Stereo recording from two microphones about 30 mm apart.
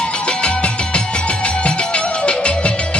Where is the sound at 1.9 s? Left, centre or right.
Left.